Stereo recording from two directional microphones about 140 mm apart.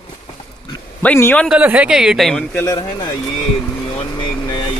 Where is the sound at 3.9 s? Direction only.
35° left (ahead or behind).